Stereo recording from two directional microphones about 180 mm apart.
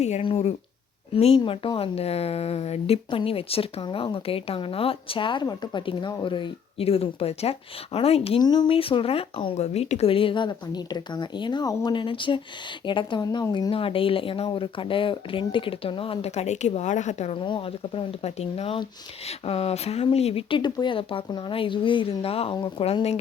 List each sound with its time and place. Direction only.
0.0 s speech: 35° left (ahead or behind)